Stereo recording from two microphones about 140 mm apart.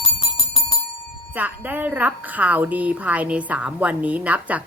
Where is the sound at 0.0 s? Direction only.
35° left (ahead or behind).